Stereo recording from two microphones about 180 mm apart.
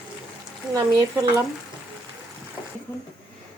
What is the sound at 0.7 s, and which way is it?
Speech, 20° right (ahead or behind).